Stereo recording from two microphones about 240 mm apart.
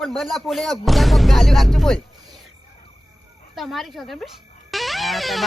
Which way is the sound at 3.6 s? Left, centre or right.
Centre.